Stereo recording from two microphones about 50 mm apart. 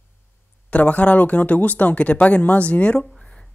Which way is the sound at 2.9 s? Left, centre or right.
Centre.